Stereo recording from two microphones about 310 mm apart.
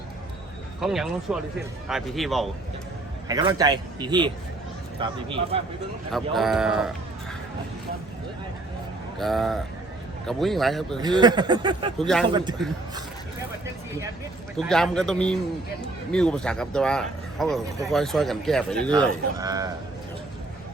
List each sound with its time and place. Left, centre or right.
0.8 s speech: centre
3.2 s a man's voice: centre
6.1 s speech: centre
9.1 s speech: centre
10.9 s a man's voice: centre
11.9 s speech: centre
14.5 s speech: centre
18.9 s a man's voice: centre